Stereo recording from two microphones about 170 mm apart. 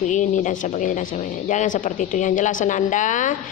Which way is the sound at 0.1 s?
45° left (ahead or behind).